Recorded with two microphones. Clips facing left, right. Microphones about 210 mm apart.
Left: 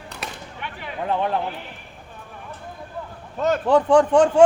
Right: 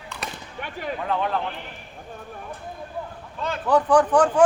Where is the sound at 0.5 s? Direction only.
45° right (ahead or behind).